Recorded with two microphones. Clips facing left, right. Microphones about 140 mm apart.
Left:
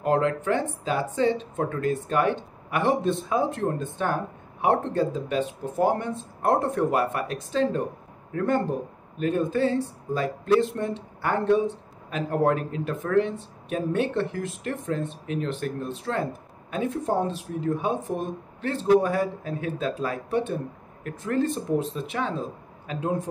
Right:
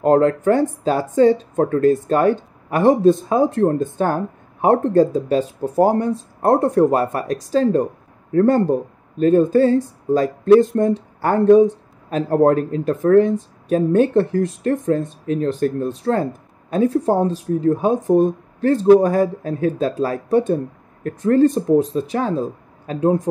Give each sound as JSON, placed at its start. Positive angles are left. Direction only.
{"t": 0.0, "sound": "speech", "side_deg": -40}